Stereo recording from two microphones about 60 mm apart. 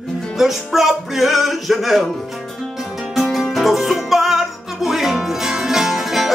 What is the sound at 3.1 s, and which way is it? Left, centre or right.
Music, centre.